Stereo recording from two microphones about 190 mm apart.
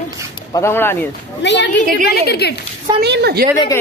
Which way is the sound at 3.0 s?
60° right (ahead or behind).